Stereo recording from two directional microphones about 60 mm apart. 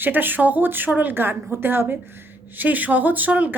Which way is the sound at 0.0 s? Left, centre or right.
Right.